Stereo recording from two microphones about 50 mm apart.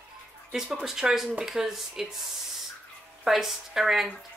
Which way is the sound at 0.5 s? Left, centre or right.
Centre.